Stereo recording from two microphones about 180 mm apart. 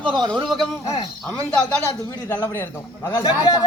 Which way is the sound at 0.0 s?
25° right (ahead or behind).